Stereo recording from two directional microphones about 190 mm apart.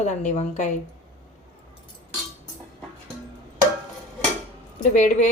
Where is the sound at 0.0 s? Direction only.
40° left (ahead or behind).